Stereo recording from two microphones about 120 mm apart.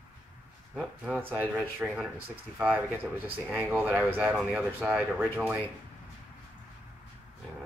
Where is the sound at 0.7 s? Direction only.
10° right (ahead or behind).